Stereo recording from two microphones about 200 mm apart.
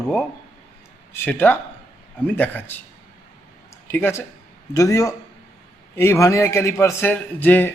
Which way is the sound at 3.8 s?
10° left (ahead or behind).